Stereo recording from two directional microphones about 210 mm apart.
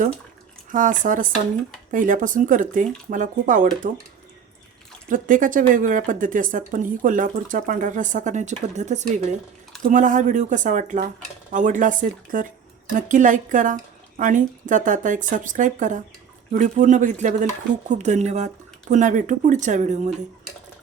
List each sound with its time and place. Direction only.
0.7 s a woman's voice: 40° right (ahead or behind)
5.0 s a woman's voice: 40° right (ahead or behind)